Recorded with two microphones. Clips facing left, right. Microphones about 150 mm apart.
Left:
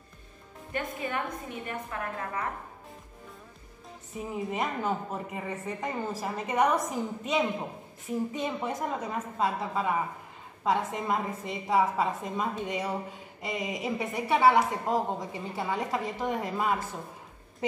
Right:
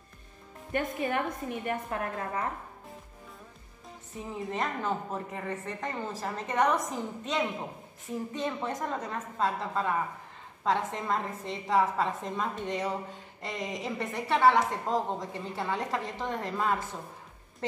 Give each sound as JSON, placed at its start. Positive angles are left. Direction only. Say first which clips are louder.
{"t": 0.7, "sound": "a woman's voice", "louder": "right 3 dB", "side_deg": -40}
{"t": 4.3, "sound": "a woman's voice", "louder": "left 1 dB", "side_deg": 10}